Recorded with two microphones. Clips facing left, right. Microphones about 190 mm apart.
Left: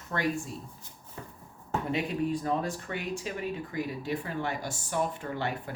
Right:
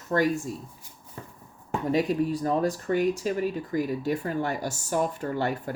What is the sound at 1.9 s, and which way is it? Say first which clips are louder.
Speech: right 6 dB; 40° right (ahead or behind).